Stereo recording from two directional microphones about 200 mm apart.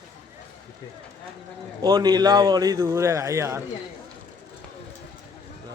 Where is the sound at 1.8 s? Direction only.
20° right (ahead or behind).